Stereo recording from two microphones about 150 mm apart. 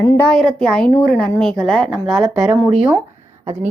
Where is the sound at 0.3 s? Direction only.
5° left (ahead or behind).